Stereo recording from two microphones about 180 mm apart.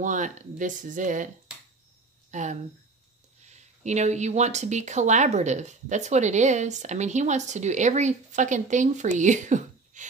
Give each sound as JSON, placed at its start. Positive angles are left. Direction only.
{"t": 0.0, "sound": "speech", "side_deg": -45}
{"t": 2.3, "sound": "speech", "side_deg": -40}